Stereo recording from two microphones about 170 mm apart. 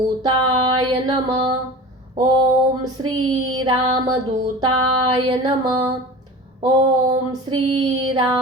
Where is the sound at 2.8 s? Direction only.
25° right (ahead or behind).